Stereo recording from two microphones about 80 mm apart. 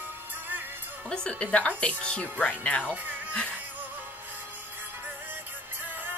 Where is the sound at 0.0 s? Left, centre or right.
Right.